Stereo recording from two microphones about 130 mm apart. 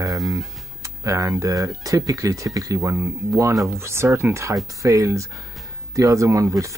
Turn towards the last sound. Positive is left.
turn(degrees=-25)  # may be behind; listen again after turning